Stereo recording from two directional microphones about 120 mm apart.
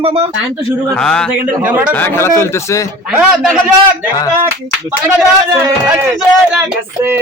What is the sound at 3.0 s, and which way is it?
Speech, 5° right (ahead or behind).